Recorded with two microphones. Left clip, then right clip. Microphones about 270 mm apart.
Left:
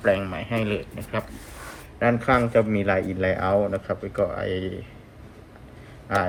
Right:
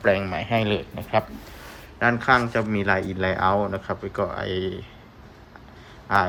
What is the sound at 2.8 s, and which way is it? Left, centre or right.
Speech, right.